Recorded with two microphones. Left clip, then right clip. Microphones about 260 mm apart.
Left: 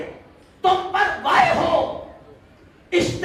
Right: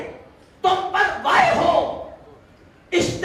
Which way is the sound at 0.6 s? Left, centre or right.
Left.